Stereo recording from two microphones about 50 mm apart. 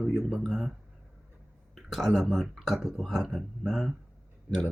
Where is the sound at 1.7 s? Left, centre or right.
Centre.